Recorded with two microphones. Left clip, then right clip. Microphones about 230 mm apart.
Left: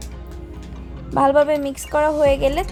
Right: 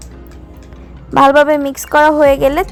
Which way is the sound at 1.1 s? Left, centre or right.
Right.